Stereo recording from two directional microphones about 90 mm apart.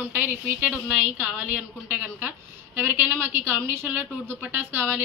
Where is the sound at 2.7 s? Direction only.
20° right (ahead or behind).